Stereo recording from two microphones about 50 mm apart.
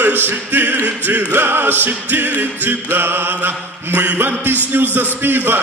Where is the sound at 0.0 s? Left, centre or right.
Right.